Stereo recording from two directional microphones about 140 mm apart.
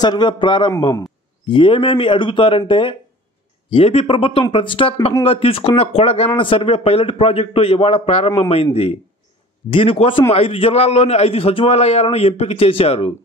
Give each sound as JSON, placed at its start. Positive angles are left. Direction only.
{"t": 0.0, "sound": "speech", "side_deg": 30}
{"t": 9.7, "sound": "speech", "side_deg": 40}